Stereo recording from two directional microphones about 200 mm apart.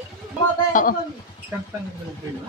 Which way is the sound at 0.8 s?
40° left (ahead or behind).